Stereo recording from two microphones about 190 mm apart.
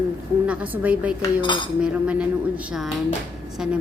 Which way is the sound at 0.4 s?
5° right (ahead or behind).